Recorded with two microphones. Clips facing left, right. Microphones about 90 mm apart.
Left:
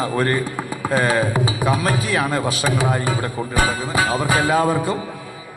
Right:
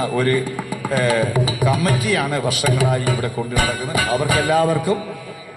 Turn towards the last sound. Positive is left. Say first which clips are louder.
# right 1 dB
turn(degrees=25)  # may be behind; listen again after turning